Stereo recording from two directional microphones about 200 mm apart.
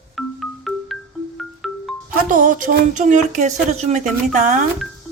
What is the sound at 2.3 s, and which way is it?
Speech, 40° right (ahead or behind).